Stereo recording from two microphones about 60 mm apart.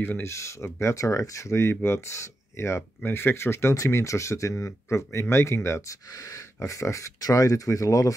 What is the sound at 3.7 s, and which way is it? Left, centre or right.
Speech, left.